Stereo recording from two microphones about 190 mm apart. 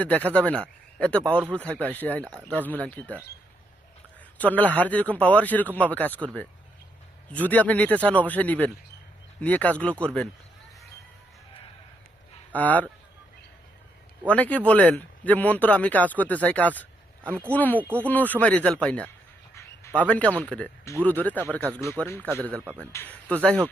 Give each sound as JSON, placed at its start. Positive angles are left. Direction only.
{"t": 0.3, "sound": "speech", "side_deg": 5}
{"t": 4.4, "sound": "a man's voice", "side_deg": 10}
{"t": 9.9, "sound": "speech", "side_deg": -10}
{"t": 12.5, "sound": "speech", "side_deg": 10}
{"t": 14.3, "sound": "speech", "side_deg": 5}
{"t": 19.5, "sound": "a sound", "side_deg": 10}
{"t": 20.4, "sound": "speech", "side_deg": 5}
{"t": 22.6, "sound": "speech", "side_deg": -10}
{"t": 22.9, "sound": "speech", "side_deg": 10}